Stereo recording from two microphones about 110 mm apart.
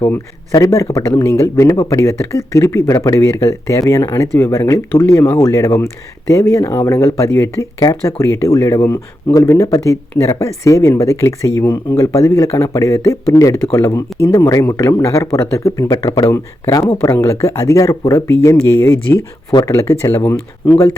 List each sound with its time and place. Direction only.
0.0 s speech: 30° left (ahead or behind)
19.5 s speech: 30° left (ahead or behind)